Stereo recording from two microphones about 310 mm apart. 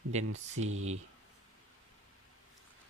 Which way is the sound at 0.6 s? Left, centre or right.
Right.